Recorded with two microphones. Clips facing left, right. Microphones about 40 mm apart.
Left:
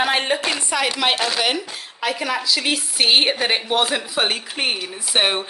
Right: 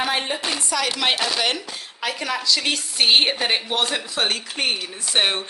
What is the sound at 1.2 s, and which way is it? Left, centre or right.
Speech, centre.